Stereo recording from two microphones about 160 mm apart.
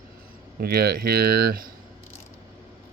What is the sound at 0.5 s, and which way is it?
Speech, 80° right.